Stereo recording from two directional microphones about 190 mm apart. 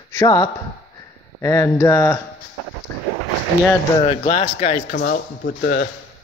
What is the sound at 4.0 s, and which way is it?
Speech, 30° left (ahead or behind).